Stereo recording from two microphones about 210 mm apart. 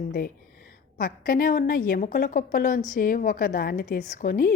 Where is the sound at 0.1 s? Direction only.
45° left (ahead or behind).